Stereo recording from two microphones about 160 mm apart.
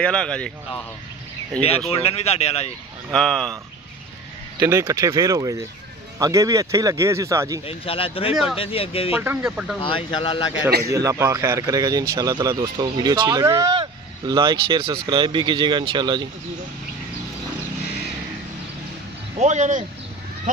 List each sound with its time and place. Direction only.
0.0 s speech: 5° left (ahead or behind)
1.9 s speech: 40° left (ahead or behind)
3.1 s speech: 5° left (ahead or behind)
4.6 s speech: 20° right (ahead or behind)
7.6 s speech: 35° left (ahead or behind)
9.1 s speech: 10° right (ahead or behind)
9.8 s speech: 35° left (ahead or behind)
10.9 s speech: 20° right (ahead or behind)
19.3 s speech: 45° right (ahead or behind)